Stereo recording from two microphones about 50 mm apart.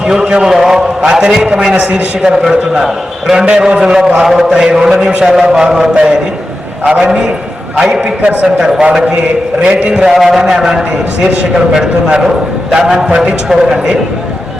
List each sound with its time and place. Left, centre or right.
0.0 s a man's voice: centre
0.5 s a man's voice: centre
3.4 s a man's voice: right
10.0 s a man's voice: centre
13.1 s a man's voice: right